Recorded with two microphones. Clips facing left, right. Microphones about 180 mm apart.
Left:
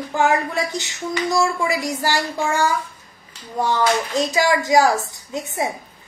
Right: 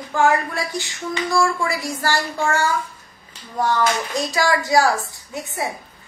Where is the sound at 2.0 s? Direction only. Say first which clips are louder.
Right 2 dB; 15° left (ahead or behind).